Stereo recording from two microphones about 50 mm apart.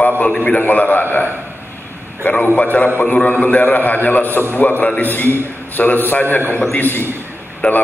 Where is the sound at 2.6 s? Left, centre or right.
Left.